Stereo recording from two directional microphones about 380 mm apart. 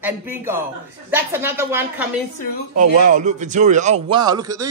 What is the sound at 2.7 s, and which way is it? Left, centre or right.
A man's voice, right.